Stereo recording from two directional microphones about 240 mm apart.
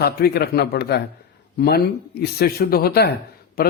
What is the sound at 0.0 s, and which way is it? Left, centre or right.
A man's voice, left.